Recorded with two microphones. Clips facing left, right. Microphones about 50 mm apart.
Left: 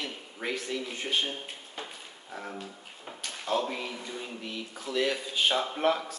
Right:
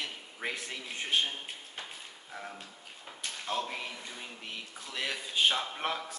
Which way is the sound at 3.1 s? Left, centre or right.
Centre.